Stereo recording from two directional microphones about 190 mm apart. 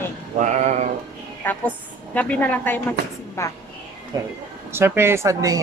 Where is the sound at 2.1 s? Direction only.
10° left (ahead or behind).